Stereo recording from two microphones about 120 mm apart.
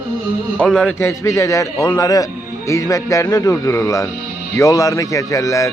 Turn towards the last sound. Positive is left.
turn(degrees=25)  # may be behind; listen again after turning